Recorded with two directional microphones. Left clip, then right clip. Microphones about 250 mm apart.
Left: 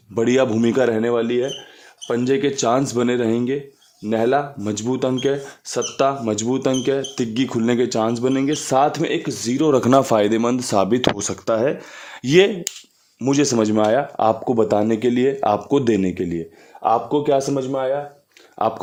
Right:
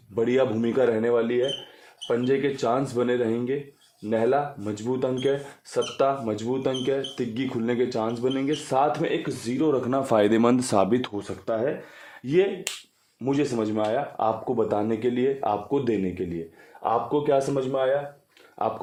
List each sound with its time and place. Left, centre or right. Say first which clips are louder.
0.1 s speech: left 5 dB; left
10.0 s speech: left 4 dB; centre
11.2 s speech: left 7 dB; left